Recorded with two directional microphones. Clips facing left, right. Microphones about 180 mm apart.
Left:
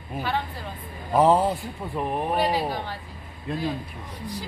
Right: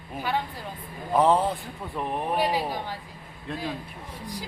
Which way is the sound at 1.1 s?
5° left (ahead or behind).